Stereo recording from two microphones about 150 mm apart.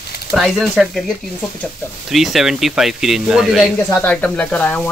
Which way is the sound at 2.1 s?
Centre (ahead or behind).